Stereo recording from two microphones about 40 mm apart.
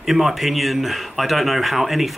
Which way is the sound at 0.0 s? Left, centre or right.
Centre.